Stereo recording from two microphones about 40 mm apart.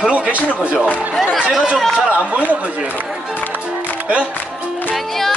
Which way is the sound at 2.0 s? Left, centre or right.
Right.